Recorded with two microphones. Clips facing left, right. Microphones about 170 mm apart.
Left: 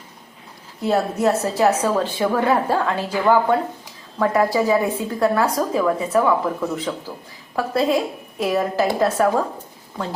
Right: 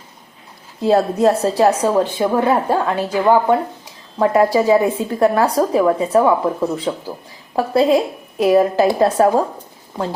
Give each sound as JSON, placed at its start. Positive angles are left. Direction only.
{"t": 0.8, "sound": "a woman's voice", "side_deg": -30}